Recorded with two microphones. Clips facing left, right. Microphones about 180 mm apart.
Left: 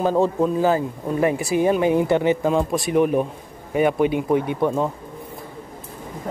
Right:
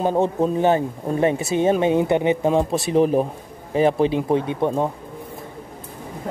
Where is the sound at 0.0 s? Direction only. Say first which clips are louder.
Left 1 dB; 20° right (ahead or behind).